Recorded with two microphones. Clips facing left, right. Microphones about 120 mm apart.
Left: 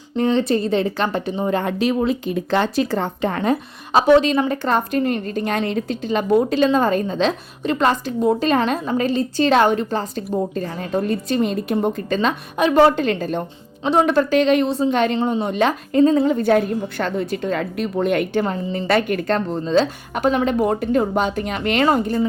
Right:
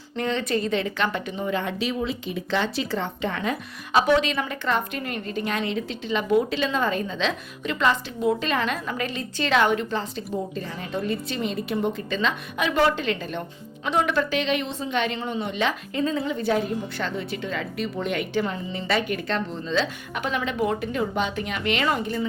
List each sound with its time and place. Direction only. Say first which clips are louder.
0.2 s a woman's voice: left 7 dB; 30° left (ahead or behind)